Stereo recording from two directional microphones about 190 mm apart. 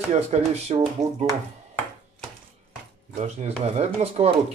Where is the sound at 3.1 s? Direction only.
35° right (ahead or behind).